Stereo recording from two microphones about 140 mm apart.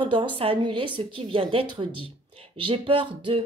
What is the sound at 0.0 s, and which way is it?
A woman's voice, 40° right (ahead or behind).